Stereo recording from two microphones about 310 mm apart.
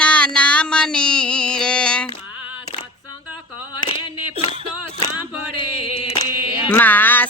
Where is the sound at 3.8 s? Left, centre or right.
Centre.